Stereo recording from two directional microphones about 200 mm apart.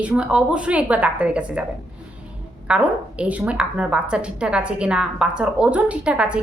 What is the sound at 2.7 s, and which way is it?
A woman's voice, 5° right (ahead or behind).